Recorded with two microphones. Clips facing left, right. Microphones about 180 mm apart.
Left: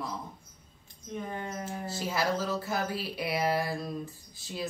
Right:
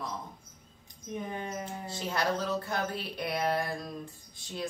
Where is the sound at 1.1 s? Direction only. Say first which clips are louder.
Even; 15° right (ahead or behind).